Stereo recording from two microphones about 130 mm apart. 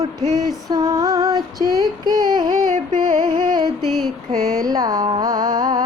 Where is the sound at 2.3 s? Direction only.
35° right (ahead or behind).